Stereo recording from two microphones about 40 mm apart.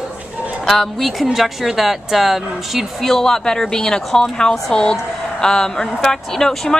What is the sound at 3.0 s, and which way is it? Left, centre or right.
Speech, centre.